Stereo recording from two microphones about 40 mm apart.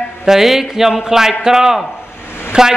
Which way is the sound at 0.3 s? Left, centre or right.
Centre.